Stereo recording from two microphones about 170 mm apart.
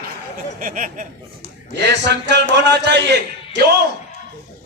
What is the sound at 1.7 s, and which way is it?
A man's voice, 90° right.